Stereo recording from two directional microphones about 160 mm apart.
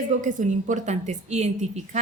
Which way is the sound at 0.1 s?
50° right (ahead or behind).